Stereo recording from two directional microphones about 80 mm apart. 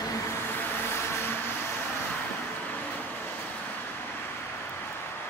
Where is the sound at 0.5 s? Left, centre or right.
Left.